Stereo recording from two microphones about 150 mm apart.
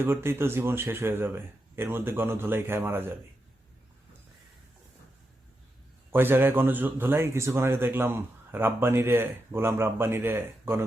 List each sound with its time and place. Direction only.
0.0 s a man's voice: 15° right (ahead or behind)
6.1 s a man's voice: 15° right (ahead or behind)